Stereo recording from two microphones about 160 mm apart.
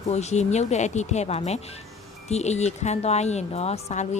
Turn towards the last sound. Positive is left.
turn(degrees=40)  # may be behind; listen again after turning